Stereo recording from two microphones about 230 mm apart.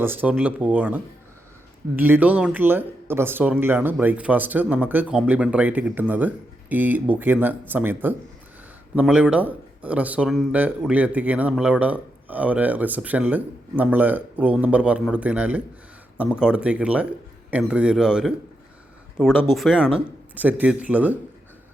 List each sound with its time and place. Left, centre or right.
0.0 s speech: centre